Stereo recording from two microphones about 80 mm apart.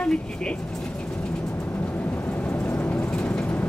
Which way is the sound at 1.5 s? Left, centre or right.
Left.